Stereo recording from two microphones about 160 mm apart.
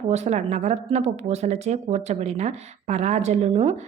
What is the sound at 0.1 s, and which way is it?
A woman's voice, 45° right (ahead or behind).